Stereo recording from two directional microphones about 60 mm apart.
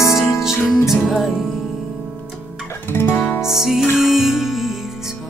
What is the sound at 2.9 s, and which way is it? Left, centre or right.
Music, left.